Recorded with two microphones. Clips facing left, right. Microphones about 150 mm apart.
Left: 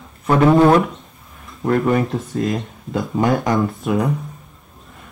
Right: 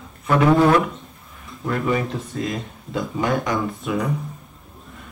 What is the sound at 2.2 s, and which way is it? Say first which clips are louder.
Speech: left 5 dB; centre (ahead or behind).